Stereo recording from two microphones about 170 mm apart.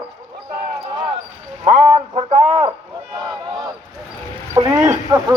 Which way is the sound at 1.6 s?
35° right (ahead or behind).